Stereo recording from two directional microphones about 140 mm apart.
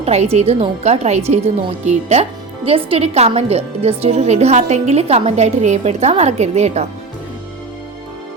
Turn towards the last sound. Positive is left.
turn(degrees=-50)  # may be behind; listen again after turning